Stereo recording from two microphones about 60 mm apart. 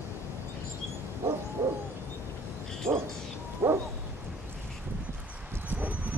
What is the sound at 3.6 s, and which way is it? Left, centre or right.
Bow-wow, right.